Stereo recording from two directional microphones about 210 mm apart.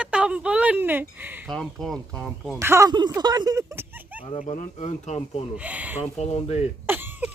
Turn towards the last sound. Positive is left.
turn(degrees=-10)  # may be behind; listen again after turning